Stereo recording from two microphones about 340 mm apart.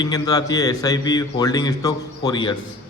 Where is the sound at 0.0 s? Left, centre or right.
Centre.